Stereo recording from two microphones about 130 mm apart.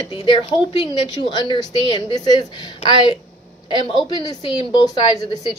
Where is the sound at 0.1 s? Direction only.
40° left (ahead or behind).